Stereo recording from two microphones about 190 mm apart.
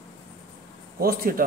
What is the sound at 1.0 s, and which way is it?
Speech, 50° right (ahead or behind).